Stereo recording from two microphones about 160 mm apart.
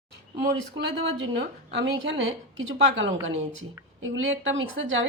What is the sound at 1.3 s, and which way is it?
Speech, 90° right.